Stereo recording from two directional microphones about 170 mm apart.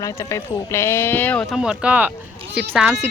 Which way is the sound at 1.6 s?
5° right (ahead or behind).